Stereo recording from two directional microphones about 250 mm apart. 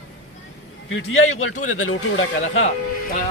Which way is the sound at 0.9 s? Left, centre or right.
Left.